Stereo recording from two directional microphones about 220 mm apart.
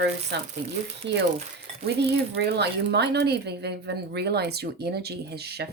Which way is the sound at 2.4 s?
50° right (ahead or behind).